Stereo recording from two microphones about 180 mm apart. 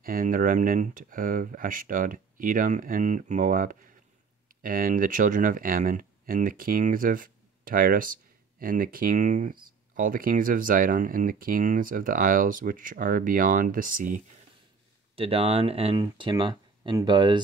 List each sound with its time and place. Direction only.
0.0 s speech: 50° right (ahead or behind)
15.1 s speech: 30° right (ahead or behind)